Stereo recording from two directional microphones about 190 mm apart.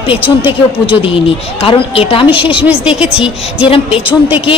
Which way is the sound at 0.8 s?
30° left (ahead or behind).